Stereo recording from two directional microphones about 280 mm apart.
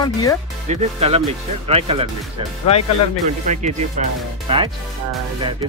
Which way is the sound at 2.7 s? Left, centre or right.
Left.